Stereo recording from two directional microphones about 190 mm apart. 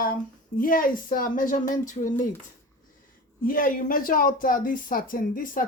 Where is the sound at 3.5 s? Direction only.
45° left (ahead or behind).